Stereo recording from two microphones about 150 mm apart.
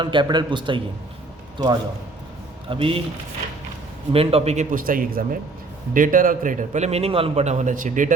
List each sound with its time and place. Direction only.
0.0 s a man's voice: 30° right (ahead or behind)
4.1 s speech: 40° right (ahead or behind)
4.7 s a man's voice: 65° right (ahead or behind)